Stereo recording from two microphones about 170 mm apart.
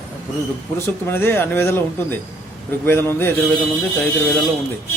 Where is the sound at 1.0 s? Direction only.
10° left (ahead or behind).